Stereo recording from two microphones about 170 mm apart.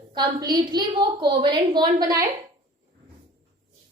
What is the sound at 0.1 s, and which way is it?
A woman's voice, 25° right (ahead or behind).